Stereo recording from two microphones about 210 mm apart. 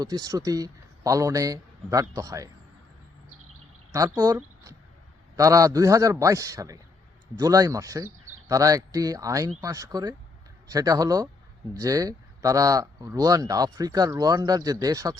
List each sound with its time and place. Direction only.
0.0 s speech: 20° right (ahead or behind)
3.9 s speech: 15° right (ahead or behind)